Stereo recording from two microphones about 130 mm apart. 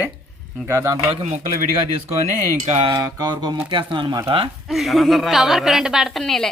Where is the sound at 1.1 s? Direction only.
60° right (ahead or behind).